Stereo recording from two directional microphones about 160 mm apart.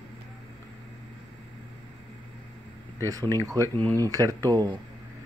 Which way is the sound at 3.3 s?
20° right (ahead or behind).